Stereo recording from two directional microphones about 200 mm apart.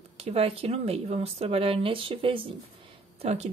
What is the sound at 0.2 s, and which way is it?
Speech, 30° right (ahead or behind).